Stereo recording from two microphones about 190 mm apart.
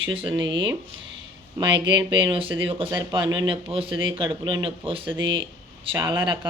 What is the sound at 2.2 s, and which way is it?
Speech, 25° right (ahead or behind).